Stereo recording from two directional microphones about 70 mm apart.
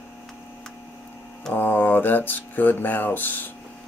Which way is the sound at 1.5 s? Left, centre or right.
Left.